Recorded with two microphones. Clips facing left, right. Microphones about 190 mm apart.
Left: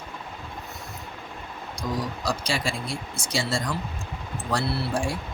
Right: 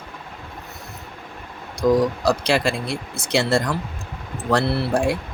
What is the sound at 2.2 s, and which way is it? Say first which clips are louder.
Speech: right 8 dB; 65° right (ahead or behind).